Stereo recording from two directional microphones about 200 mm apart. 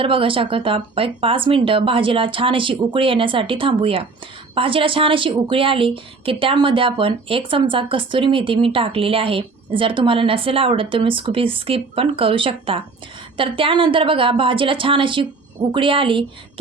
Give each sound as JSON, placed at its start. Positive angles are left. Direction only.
{"t": 0.0, "sound": "a woman's voice", "side_deg": -25}